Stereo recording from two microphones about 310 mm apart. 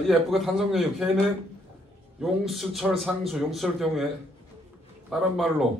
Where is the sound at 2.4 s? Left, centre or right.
Centre.